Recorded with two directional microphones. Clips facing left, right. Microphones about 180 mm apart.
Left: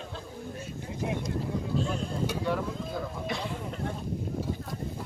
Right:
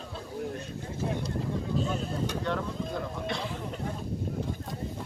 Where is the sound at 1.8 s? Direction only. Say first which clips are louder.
Even; 5° right (ahead or behind).